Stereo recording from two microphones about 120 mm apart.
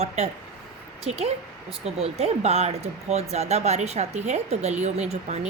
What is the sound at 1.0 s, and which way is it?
Speech, 60° right (ahead or behind).